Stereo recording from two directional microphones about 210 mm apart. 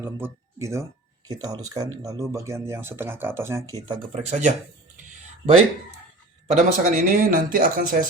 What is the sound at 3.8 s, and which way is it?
Speech, 25° right (ahead or behind).